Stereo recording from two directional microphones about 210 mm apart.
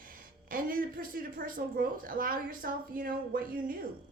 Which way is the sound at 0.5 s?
40° right (ahead or behind).